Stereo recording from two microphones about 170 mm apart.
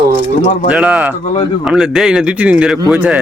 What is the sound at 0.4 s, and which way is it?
Speech, 40° left (ahead or behind).